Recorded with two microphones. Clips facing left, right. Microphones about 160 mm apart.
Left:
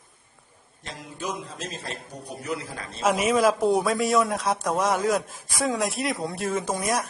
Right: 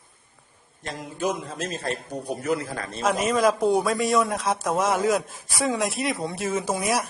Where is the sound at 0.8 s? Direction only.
50° right (ahead or behind).